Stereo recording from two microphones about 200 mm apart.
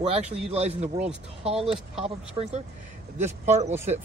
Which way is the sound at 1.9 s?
30° right (ahead or behind).